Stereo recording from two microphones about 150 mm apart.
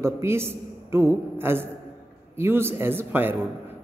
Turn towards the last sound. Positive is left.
turn(degrees=-15)  # may be behind; listen again after turning